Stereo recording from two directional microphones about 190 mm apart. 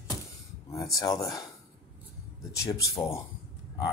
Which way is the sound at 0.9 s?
15° left (ahead or behind).